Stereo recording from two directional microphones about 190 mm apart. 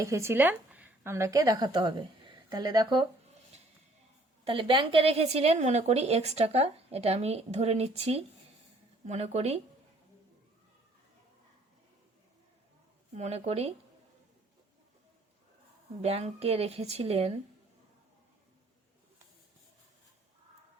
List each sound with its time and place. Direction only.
0.0 s a woman's voice: 15° right (ahead or behind)
4.4 s a woman's voice: 25° right (ahead or behind)
13.1 s a woman's voice: 35° right (ahead or behind)
16.0 s a woman's voice: 35° right (ahead or behind)